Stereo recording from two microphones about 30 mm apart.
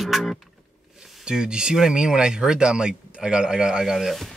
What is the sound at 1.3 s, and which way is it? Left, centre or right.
A man's voice, right.